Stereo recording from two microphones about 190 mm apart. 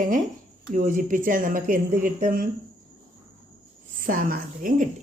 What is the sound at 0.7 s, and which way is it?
Speech, 40° right (ahead or behind).